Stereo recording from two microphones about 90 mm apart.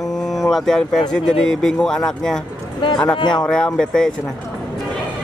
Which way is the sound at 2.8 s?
60° left (ahead or behind).